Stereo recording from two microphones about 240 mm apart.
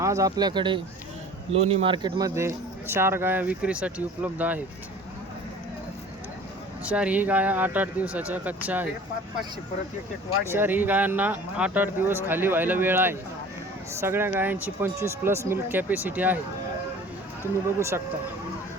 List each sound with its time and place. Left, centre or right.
0.0 s speech: centre
6.8 s speech: centre
10.5 s speech: centre
17.4 s speech: centre